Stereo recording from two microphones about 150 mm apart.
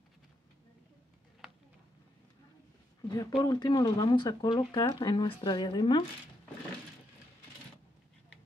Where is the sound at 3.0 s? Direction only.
25° left (ahead or behind).